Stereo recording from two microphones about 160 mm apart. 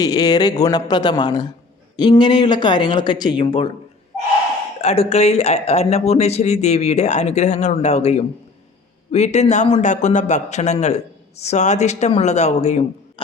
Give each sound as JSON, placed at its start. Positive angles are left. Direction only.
{"t": 0.0, "sound": "speech", "side_deg": 25}
{"t": 4.8, "sound": "a man's voice", "side_deg": 40}